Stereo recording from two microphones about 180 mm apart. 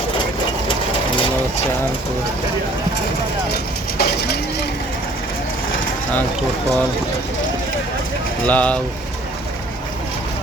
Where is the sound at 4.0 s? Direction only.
65° left (ahead or behind).